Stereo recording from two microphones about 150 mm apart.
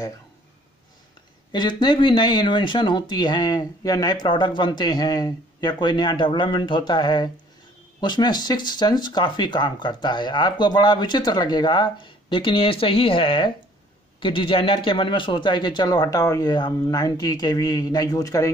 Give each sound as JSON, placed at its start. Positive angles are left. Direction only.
{"t": 1.5, "sound": "speech", "side_deg": 30}